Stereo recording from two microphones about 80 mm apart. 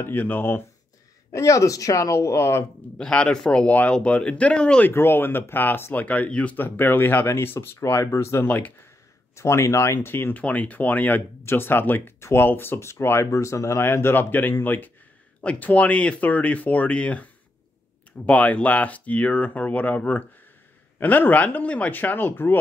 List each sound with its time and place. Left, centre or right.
0.0 s speech: left
1.3 s speech: left
3.0 s speech: centre
4.8 s speech: left
8.5 s speech: left
9.3 s speech: left